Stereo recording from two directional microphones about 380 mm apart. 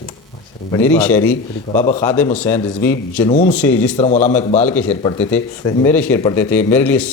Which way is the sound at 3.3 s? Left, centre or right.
Centre.